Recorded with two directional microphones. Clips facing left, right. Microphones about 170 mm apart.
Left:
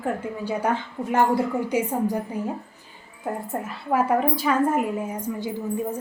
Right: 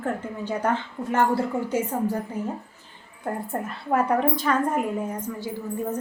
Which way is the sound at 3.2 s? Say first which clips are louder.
Even; 5° left (ahead or behind).